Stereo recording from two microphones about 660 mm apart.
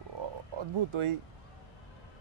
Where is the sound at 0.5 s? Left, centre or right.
Right.